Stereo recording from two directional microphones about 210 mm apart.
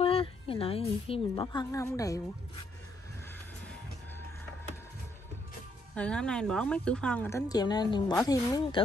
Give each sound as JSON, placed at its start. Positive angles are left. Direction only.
{"t": 0.0, "sound": "a woman's voice", "side_deg": 25}
{"t": 5.9, "sound": "speech", "side_deg": 5}